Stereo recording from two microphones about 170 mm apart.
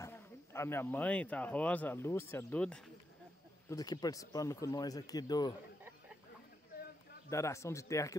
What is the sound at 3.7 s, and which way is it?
Speech, 25° left (ahead or behind).